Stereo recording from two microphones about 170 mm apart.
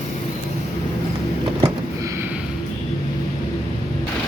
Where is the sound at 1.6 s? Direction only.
15° right (ahead or behind).